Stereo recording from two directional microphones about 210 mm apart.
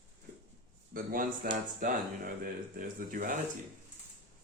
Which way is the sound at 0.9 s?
40° right (ahead or behind).